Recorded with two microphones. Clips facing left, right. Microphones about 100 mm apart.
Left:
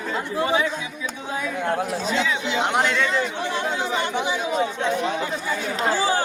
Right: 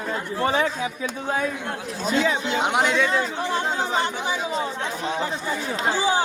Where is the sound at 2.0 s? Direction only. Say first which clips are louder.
Right 1 dB; 45° right (ahead or behind).